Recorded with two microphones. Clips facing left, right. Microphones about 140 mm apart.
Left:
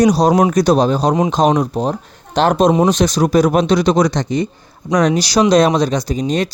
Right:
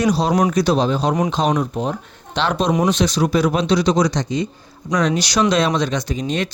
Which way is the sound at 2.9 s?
45° left (ahead or behind).